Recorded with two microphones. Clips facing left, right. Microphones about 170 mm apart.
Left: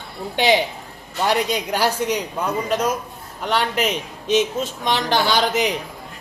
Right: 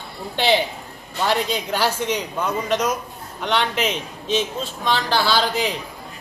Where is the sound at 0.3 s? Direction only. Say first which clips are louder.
Left 1 dB; 15° left (ahead or behind).